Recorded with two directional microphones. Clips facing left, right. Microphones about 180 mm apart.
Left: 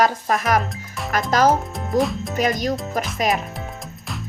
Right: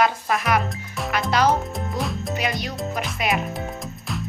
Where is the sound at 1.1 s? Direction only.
45° left (ahead or behind).